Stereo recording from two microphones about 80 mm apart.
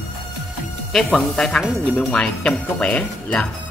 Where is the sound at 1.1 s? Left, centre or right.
Centre.